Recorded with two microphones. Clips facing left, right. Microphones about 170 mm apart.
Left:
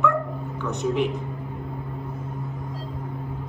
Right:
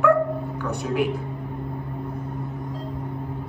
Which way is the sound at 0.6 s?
10° right (ahead or behind).